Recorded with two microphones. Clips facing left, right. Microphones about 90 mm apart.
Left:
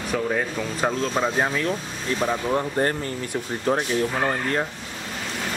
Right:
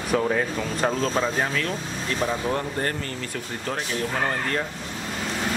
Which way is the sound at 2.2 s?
5° left (ahead or behind).